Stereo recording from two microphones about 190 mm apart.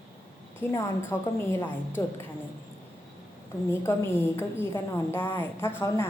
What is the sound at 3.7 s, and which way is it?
A woman's voice, 15° left (ahead or behind).